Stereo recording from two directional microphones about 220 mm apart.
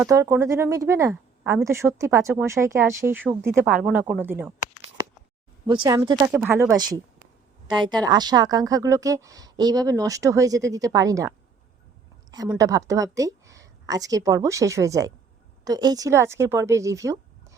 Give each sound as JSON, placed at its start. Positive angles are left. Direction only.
{"t": 0.0, "sound": "speech", "side_deg": -15}
{"t": 5.6, "sound": "speech", "side_deg": -20}
{"t": 6.0, "sound": "speech", "side_deg": -10}